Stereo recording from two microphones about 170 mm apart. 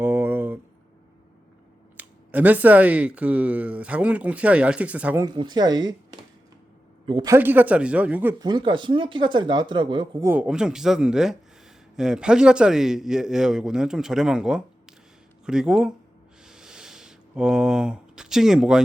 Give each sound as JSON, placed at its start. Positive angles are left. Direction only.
{"t": 0.0, "sound": "a sound", "side_deg": -10}
{"t": 2.0, "sound": "speech", "side_deg": -10}
{"t": 5.2, "sound": "speech", "side_deg": -25}
{"t": 7.3, "sound": "speech", "side_deg": -10}
{"t": 8.4, "sound": "speech", "side_deg": -25}
{"t": 10.2, "sound": "a man's voice", "side_deg": -5}
{"t": 16.4, "sound": "a sound", "side_deg": -5}